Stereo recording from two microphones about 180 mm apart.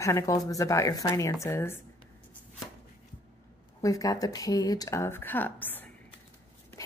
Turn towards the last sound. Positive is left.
turn(degrees=10)  # may be behind; listen again after turning